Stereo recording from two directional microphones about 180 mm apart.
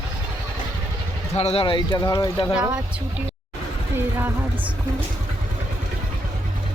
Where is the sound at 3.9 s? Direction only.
10° right (ahead or behind).